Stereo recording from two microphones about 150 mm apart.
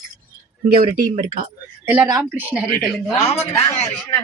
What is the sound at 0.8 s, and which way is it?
Speech, 65° right (ahead or behind).